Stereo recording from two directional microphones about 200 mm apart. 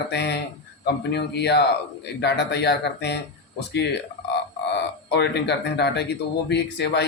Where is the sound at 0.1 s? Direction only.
60° left (ahead or behind).